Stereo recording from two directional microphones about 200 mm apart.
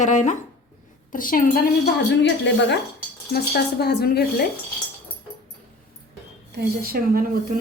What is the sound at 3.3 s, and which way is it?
Speech, 55° left (ahead or behind).